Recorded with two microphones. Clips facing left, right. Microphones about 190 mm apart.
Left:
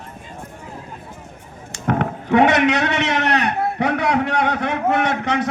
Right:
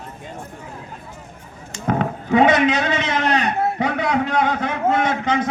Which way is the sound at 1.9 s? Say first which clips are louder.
Left 1 dB; 65° left (ahead or behind).